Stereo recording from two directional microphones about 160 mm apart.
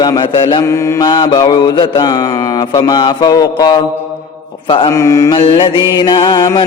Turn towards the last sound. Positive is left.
turn(degrees=30)  # may be behind; listen again after turning